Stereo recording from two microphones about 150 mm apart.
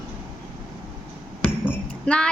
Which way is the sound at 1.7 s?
5° left (ahead or behind).